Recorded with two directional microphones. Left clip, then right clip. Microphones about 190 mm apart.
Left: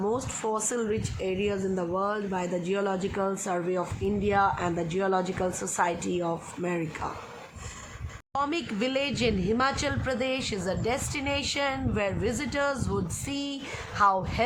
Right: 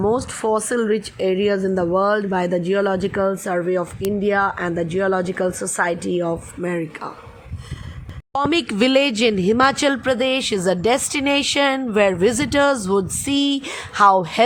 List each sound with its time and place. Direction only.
0.0 s speech: 35° right (ahead or behind); by 7.1 s 20° right (ahead or behind)
8.3 s speech: 40° right (ahead or behind)